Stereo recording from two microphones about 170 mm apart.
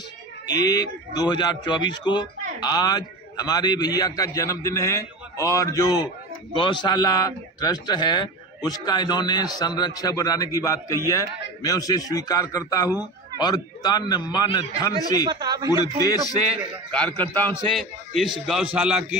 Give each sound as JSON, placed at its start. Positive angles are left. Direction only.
{"t": 0.6, "sound": "a man's voice", "side_deg": 25}
{"t": 15.2, "sound": "speech", "side_deg": -25}
{"t": 16.9, "sound": "a man's voice", "side_deg": 10}
{"t": 17.7, "sound": "a man's voice", "side_deg": 0}